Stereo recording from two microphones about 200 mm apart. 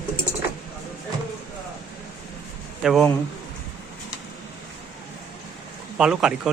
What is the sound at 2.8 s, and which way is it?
Speech, centre (ahead or behind).